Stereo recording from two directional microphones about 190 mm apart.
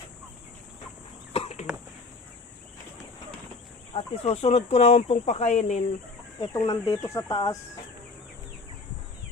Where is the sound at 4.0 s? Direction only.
30° left (ahead or behind).